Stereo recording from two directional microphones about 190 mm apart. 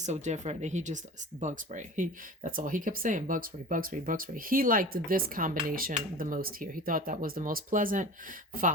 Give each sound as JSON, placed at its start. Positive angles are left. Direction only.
{"t": 0.0, "sound": "speech", "side_deg": -35}